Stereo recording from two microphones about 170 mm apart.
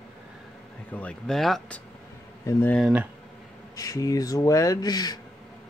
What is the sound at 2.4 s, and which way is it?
Speech, 10° left (ahead or behind).